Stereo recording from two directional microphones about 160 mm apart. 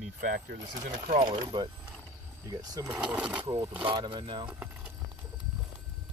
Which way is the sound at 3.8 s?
30° right (ahead or behind).